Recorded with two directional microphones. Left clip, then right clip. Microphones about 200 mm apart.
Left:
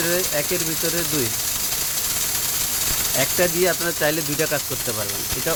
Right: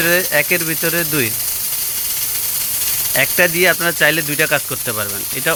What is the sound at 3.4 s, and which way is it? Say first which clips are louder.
Speech: right 7 dB; 10° right (ahead or behind).